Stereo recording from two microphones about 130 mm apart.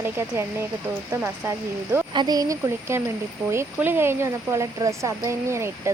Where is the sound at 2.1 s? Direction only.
35° right (ahead or behind).